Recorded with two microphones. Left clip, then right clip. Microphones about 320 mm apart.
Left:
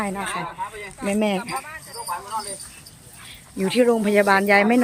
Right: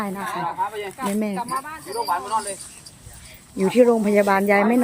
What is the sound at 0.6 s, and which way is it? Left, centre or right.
Speech, right.